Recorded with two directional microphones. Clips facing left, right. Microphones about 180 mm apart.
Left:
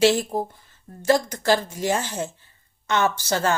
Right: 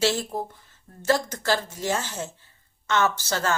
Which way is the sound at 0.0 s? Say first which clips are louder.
Left 6 dB; 15° left (ahead or behind).